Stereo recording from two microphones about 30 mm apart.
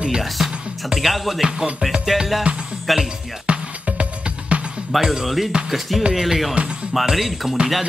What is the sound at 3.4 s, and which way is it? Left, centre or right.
Music, right.